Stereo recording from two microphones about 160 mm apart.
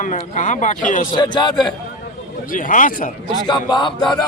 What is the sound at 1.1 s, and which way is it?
Speech, 30° left (ahead or behind).